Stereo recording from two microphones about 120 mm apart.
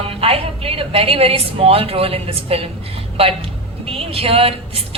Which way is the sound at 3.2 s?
55° right (ahead or behind).